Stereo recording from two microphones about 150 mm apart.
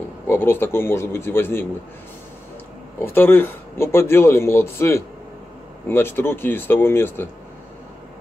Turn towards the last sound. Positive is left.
turn(degrees=15)  # may be behind; listen again after turning